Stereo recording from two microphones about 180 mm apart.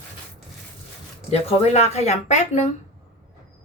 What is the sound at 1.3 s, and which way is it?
Speech, 35° left (ahead or behind).